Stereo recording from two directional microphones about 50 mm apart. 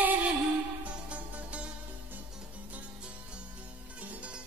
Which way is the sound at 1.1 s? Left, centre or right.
Right.